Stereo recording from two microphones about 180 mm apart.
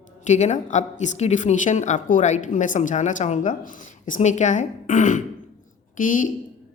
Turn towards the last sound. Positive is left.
turn(degrees=45)  # may be behind; listen again after turning